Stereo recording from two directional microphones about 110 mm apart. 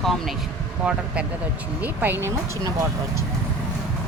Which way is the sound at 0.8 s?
10° right (ahead or behind).